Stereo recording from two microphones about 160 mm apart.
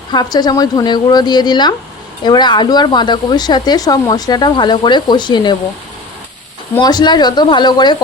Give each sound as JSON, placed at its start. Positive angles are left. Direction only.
{"t": 0.1, "sound": "speech", "side_deg": 25}
{"t": 6.7, "sound": "speech", "side_deg": 25}